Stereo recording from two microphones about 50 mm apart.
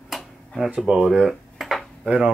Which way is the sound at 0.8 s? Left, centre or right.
Centre.